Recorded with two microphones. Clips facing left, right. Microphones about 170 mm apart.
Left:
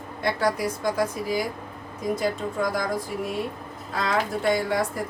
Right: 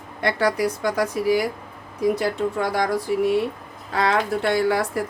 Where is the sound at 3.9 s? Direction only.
75° right (ahead or behind).